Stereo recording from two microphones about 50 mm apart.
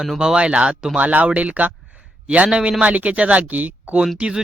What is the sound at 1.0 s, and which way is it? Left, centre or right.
Speech, right.